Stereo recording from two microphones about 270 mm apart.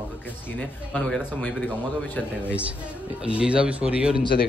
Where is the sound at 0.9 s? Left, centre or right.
Centre.